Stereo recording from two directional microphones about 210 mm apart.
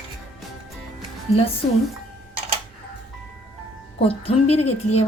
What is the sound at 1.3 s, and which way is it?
Speech, 25° left (ahead or behind).